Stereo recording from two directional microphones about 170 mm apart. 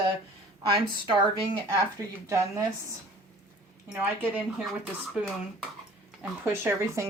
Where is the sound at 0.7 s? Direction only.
30° right (ahead or behind).